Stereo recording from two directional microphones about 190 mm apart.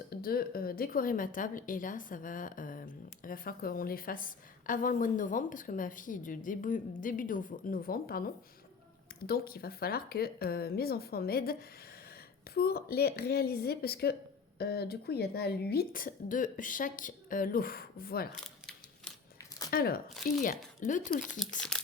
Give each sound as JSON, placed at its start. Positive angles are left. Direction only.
{"t": 0.1, "sound": "a woman's voice", "side_deg": 50}
{"t": 12.5, "sound": "a woman's voice", "side_deg": 55}
{"t": 19.7, "sound": "a woman's voice", "side_deg": 55}
{"t": 21.7, "sound": "a sound", "side_deg": 5}